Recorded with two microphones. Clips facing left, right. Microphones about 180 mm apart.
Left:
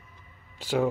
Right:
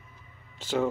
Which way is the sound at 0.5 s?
10° left (ahead or behind).